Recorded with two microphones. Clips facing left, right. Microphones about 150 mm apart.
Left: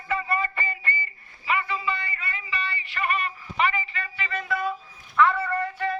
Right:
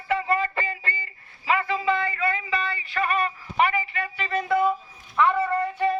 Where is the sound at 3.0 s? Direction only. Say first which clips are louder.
Right 3 dB; 90° right.